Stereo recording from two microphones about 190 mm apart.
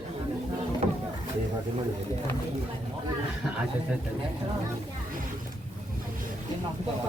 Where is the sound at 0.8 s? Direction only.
35° right (ahead or behind).